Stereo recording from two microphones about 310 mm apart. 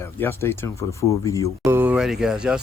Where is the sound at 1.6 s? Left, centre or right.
Centre.